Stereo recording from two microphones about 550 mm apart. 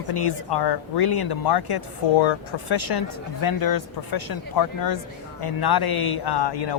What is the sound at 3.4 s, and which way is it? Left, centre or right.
Speech, left.